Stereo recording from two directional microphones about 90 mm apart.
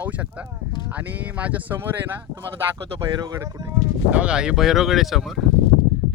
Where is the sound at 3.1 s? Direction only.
50° right (ahead or behind).